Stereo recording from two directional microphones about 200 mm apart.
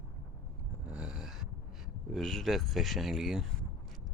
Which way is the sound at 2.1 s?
Centre (ahead or behind).